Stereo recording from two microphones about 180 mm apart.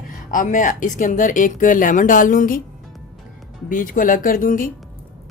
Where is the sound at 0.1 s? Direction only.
50° left (ahead or behind).